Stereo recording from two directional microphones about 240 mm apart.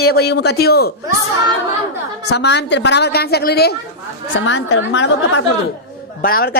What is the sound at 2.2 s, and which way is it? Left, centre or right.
A woman's voice, left.